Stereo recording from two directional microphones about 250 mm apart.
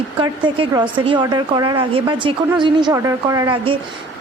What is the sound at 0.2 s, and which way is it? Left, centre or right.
A woman's voice, centre.